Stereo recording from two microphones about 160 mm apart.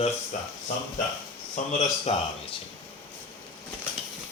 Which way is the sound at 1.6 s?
50° left (ahead or behind).